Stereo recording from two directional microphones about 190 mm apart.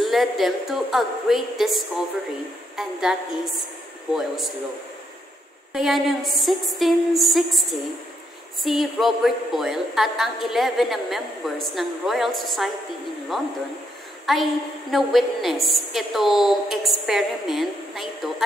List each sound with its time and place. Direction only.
0.0 s a woman's voice: centre (ahead or behind)
5.7 s a woman's voice: centre (ahead or behind)